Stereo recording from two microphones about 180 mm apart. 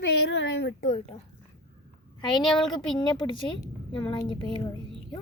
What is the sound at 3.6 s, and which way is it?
Speech, 25° left (ahead or behind).